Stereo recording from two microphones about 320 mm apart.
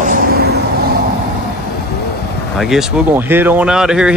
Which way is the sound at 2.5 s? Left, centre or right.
Centre.